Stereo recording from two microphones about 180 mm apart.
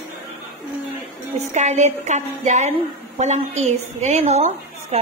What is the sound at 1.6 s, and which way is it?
A woman's voice, 40° right (ahead or behind).